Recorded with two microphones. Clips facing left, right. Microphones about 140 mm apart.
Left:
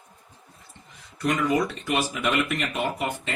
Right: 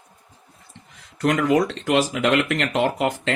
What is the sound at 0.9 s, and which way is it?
Speech, 80° right.